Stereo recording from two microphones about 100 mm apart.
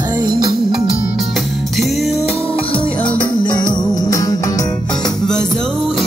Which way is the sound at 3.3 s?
45° left (ahead or behind).